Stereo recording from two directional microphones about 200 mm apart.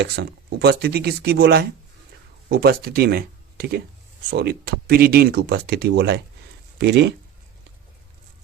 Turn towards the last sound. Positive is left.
turn(degrees=-60)  # may be behind; listen again after turning